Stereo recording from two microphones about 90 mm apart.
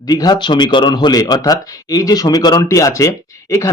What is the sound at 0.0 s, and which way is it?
Speech, 50° left (ahead or behind).